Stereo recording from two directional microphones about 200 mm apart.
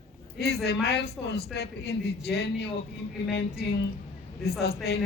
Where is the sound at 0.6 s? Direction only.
55° left (ahead or behind).